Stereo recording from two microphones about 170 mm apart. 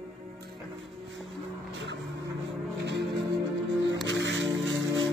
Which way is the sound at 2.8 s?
90° right.